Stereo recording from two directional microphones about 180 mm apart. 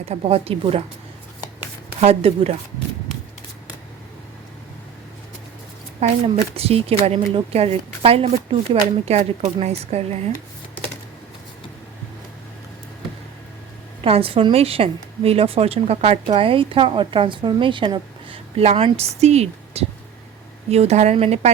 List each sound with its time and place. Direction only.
0.0 s speech: 35° right (ahead or behind)
2.0 s speech: 35° right (ahead or behind)
6.0 s speech: 35° right (ahead or behind)
14.0 s speech: 30° right (ahead or behind)